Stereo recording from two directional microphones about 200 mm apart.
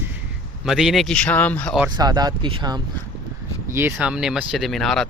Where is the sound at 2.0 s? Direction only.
20° right (ahead or behind).